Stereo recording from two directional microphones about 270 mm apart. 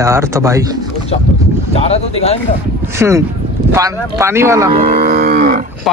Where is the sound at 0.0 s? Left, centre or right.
Centre.